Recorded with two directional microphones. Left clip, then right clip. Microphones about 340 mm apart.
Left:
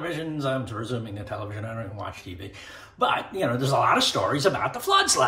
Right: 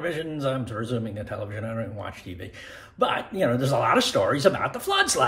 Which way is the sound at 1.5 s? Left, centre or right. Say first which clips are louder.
Right 3 dB; centre.